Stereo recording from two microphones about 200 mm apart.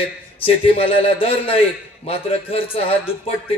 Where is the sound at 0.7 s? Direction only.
30° left (ahead or behind).